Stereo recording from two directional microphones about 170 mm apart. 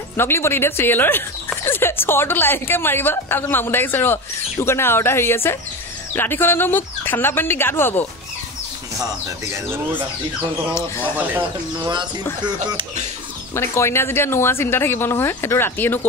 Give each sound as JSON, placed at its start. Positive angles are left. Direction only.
{"t": 0.2, "sound": "speech", "side_deg": 15}
{"t": 11.8, "sound": "speech", "side_deg": -25}
{"t": 13.6, "sound": "speech", "side_deg": 15}